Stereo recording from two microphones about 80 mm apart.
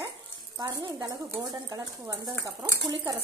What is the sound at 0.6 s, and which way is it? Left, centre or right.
Speech, right.